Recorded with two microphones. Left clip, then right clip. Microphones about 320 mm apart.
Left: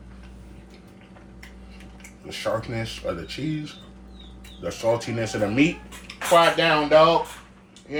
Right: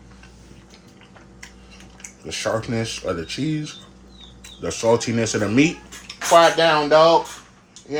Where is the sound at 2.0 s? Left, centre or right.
Right.